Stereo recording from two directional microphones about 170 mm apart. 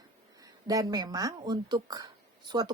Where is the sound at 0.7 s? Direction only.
20° right (ahead or behind).